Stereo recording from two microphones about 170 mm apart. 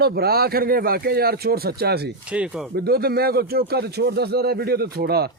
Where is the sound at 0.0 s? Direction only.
70° right (ahead or behind).